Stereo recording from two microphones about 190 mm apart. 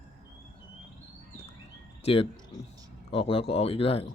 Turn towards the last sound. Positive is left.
turn(degrees=30)  # may be behind; listen again after turning